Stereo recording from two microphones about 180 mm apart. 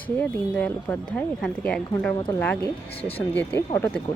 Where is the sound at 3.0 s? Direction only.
30° left (ahead or behind).